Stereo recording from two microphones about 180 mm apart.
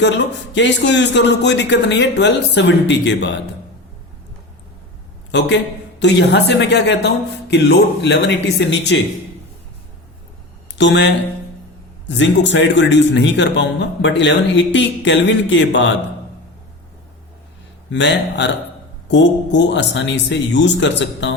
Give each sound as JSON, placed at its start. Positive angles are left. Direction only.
{"t": 0.5, "sound": "a woman's voice", "side_deg": 75}
{"t": 5.3, "sound": "a man's voice", "side_deg": 70}
{"t": 10.8, "sound": "a man's voice", "side_deg": 85}
{"t": 17.9, "sound": "a woman's voice", "side_deg": 75}